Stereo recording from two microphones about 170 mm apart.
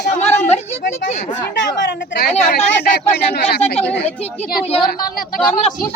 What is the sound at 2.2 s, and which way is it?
A woman's voice, 70° left (ahead or behind).